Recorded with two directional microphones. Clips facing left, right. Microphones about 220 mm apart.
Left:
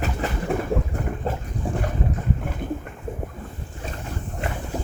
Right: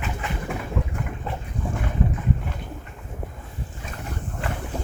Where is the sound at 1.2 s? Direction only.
35° left (ahead or behind).